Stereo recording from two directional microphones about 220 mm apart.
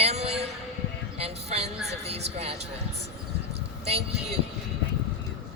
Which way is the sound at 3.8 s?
30° right (ahead or behind).